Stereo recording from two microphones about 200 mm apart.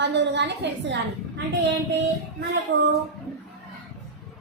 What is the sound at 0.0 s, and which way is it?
Speech, 60° right (ahead or behind).